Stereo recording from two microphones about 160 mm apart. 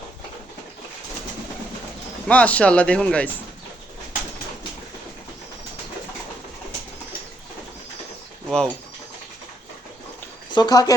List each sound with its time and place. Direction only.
2.2 s speech: 10° left (ahead or behind)
8.4 s speech: 5° left (ahead or behind)
10.5 s speech: 25° left (ahead or behind)